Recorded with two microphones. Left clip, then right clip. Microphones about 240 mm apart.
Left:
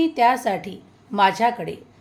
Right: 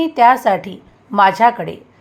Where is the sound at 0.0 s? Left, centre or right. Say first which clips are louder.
Right 7 dB; centre.